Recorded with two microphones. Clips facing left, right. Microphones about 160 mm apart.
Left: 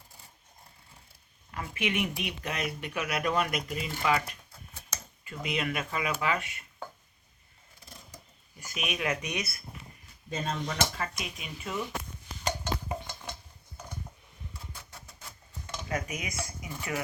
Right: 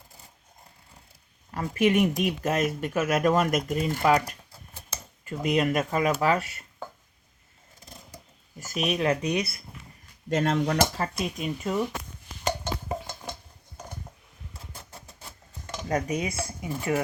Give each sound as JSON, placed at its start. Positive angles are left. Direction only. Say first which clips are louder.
{"t": 1.5, "sound": "speech", "louder": "right 10 dB", "side_deg": -40}
{"t": 8.5, "sound": "speech", "louder": "right 8 dB", "side_deg": -40}
{"t": 10.2, "sound": "speech", "louder": "right 9 dB", "side_deg": -85}
{"t": 10.8, "sound": "speech", "louder": "right 7 dB", "side_deg": -35}
{"t": 15.9, "sound": "speech", "louder": "right 8 dB", "side_deg": -35}